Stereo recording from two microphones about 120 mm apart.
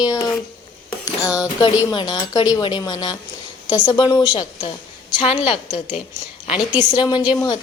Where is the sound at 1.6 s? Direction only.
35° left (ahead or behind).